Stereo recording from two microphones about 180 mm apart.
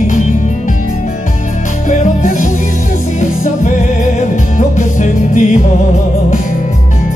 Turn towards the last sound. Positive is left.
turn(degrees=40)  # may be behind; listen again after turning